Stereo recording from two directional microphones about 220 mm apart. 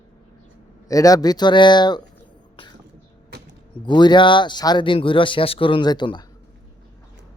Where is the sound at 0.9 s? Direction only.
15° left (ahead or behind).